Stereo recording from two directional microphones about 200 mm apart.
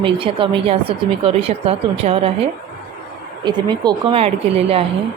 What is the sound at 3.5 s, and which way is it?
A woman's voice, 20° right (ahead or behind).